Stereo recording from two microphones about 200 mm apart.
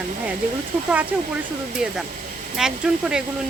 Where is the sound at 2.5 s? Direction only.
5° right (ahead or behind).